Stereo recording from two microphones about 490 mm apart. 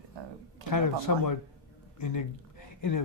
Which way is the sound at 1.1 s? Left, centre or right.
Left.